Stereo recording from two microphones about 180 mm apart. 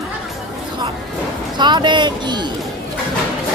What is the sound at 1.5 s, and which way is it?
Music, 25° right (ahead or behind).